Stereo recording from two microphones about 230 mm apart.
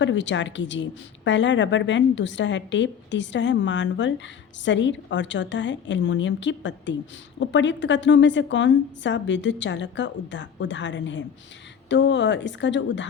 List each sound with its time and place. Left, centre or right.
0.0 s a woman's voice: left